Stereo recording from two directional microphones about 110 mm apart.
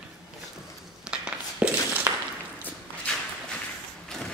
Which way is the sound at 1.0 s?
10° right (ahead or behind).